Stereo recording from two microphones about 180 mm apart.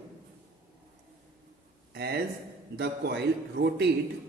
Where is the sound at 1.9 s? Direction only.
60° right (ahead or behind).